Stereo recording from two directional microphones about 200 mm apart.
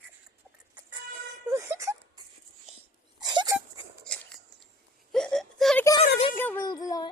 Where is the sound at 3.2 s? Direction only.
20° right (ahead or behind).